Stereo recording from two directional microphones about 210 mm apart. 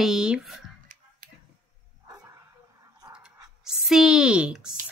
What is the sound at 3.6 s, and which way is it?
Speech, centre (ahead or behind).